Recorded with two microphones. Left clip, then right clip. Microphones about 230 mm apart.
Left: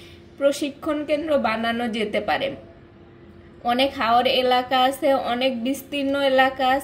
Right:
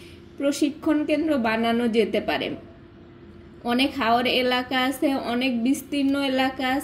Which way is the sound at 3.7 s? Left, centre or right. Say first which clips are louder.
Left 2 dB; centre.